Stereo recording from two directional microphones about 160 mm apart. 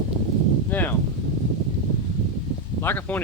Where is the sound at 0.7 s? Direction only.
10° left (ahead or behind).